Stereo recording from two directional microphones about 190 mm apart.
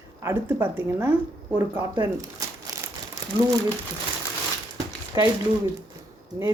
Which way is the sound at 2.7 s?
20° right (ahead or behind).